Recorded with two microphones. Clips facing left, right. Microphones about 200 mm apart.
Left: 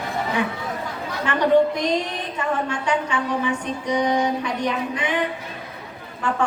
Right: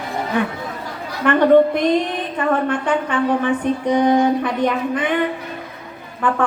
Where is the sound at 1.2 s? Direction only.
55° right (ahead or behind).